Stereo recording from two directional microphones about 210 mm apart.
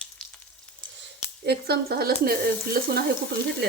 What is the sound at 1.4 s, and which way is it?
A woman's voice, 50° right (ahead or behind).